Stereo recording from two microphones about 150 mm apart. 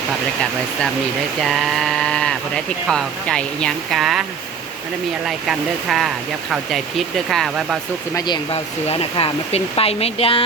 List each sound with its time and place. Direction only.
1.4 s speech: centre (ahead or behind)
5.5 s speech: centre (ahead or behind)
8.5 s speech: 40° left (ahead or behind)